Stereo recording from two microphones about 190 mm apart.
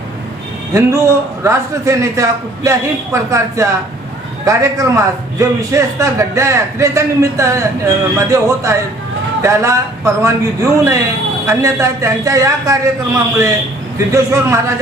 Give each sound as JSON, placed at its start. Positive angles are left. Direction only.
{"t": 0.7, "sound": "a man's voice", "side_deg": -15}
{"t": 14.1, "sound": "a man's voice", "side_deg": -15}